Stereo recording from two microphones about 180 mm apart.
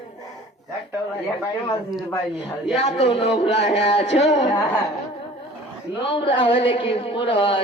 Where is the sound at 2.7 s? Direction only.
35° left (ahead or behind).